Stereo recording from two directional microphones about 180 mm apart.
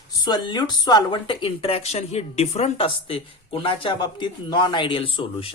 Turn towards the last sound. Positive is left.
turn(degrees=30)  # may be behind; listen again after turning